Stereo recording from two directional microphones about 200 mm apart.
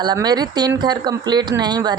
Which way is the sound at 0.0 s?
20° right (ahead or behind).